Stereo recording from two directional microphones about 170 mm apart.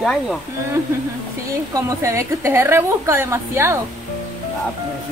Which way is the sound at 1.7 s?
15° right (ahead or behind).